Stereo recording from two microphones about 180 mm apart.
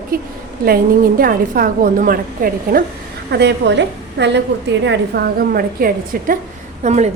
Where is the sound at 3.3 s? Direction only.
70° right (ahead or behind).